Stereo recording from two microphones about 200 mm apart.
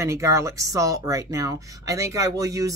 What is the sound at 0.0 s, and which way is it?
Speech, 15° right (ahead or behind).